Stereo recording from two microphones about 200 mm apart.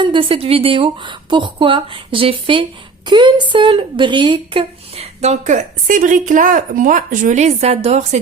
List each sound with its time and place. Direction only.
0.0 s speech: 25° right (ahead or behind)